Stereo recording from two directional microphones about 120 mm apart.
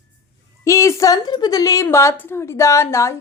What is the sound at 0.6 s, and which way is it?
A woman's voice, 25° left (ahead or behind).